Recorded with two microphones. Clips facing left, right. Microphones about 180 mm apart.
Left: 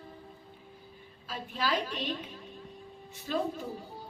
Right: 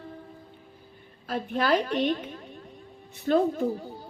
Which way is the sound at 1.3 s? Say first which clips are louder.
Right 8 dB; 60° right (ahead or behind).